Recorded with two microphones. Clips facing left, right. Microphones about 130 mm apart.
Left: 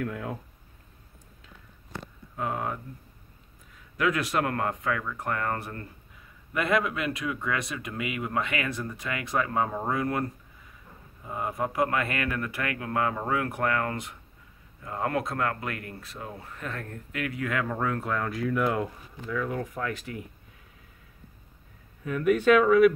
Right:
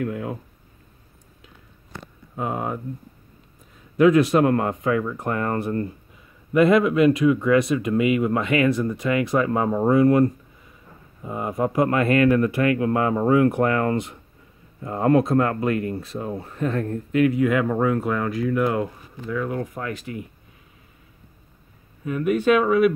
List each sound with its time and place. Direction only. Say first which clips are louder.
0.0 s a sound: right 5 dB; 10° right (ahead or behind)
2.3 s speech: right 4 dB; 20° right (ahead or behind)
3.9 s speech: right 11 dB; 25° right (ahead or behind)
11.2 s speech: right 6 dB; 20° right (ahead or behind)
19.9 s speech: right 4 dB; 5° right (ahead or behind)
22.0 s speech: right 2 dB; 10° right (ahead or behind)